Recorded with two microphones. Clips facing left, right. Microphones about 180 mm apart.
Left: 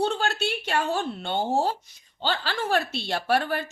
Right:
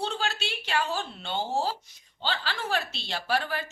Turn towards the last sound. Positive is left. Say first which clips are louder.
# left 5 dB
turn(degrees=55)  # may be behind; listen again after turning